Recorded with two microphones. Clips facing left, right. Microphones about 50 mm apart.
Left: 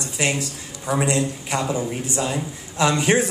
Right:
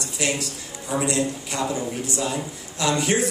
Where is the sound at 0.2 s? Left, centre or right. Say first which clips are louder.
Left 2 dB; left.